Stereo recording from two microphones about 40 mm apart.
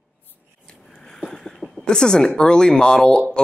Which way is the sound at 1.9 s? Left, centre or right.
Centre.